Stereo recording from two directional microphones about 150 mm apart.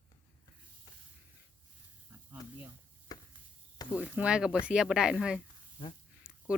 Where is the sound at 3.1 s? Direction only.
25° left (ahead or behind).